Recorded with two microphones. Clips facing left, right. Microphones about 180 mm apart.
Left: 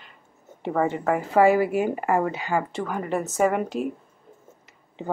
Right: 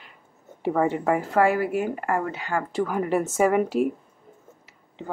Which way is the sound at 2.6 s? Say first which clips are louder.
Right 4 dB; 5° right (ahead or behind).